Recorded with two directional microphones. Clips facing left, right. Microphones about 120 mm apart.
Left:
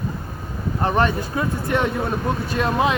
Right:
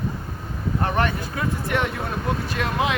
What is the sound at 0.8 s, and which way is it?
Speech, 30° left (ahead or behind).